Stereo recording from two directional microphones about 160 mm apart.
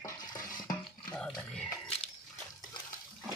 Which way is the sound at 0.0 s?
25° left (ahead or behind).